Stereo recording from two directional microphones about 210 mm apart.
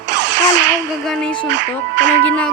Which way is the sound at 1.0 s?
Centre (ahead or behind).